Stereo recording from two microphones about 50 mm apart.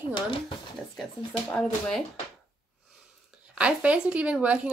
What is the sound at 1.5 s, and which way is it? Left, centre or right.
Speech, centre.